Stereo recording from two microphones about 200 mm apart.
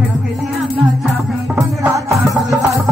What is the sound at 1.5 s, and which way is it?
Music, 15° right (ahead or behind).